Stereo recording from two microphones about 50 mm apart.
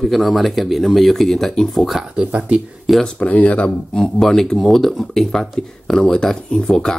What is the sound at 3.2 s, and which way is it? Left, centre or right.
Speech, left.